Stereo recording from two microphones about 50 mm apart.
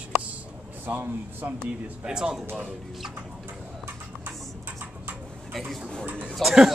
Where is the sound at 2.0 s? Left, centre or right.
Centre.